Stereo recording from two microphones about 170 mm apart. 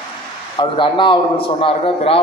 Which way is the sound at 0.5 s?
30° left (ahead or behind).